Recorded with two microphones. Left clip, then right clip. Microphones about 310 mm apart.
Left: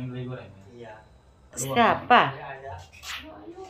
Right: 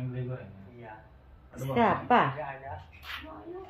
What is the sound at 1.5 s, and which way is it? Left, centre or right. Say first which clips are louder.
Speech: left 5 dB; centre.